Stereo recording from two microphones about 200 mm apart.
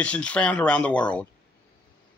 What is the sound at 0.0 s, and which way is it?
Speech, 5° left (ahead or behind).